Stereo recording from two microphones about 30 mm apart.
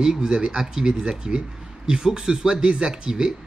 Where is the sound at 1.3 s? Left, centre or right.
Right.